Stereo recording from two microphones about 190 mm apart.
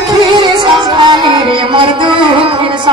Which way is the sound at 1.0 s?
25° right (ahead or behind).